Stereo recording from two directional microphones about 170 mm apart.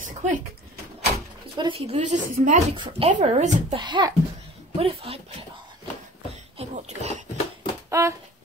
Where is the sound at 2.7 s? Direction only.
30° right (ahead or behind).